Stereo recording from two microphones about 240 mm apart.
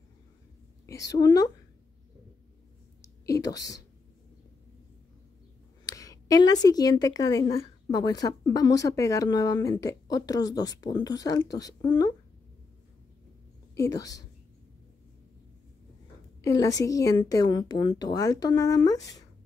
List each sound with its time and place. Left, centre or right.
0.8 s speech: centre
3.3 s a sound: centre
5.9 s speech: centre
13.7 s speech: centre
16.3 s speech: centre